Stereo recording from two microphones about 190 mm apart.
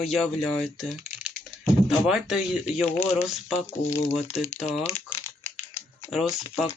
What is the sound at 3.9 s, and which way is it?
Speech, 30° left (ahead or behind).